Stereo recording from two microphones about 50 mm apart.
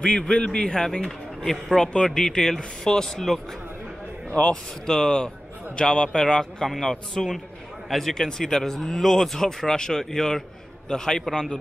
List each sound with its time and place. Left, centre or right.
0.0 s speech: centre
4.3 s speech: centre